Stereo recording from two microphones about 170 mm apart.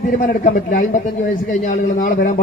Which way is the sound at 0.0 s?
55° left (ahead or behind).